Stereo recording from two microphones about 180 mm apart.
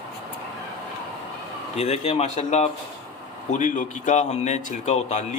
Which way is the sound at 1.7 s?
35° left (ahead or behind).